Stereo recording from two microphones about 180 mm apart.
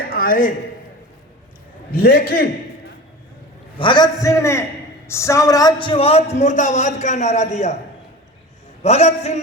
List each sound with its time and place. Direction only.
0.1 s a sound: 50° left (ahead or behind)
1.9 s a man's voice: 60° left (ahead or behind)
3.8 s a man's voice: 25° left (ahead or behind)
8.8 s a man's voice: 35° left (ahead or behind)